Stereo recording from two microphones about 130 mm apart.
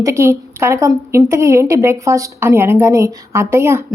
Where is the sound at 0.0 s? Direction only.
20° right (ahead or behind).